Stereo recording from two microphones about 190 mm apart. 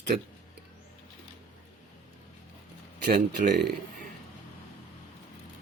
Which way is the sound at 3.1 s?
60° right (ahead or behind).